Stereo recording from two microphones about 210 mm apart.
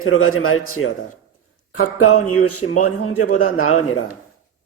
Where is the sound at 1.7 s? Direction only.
90° left.